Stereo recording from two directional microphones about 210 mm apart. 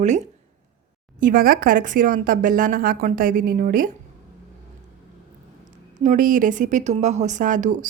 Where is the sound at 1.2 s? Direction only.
45° right (ahead or behind).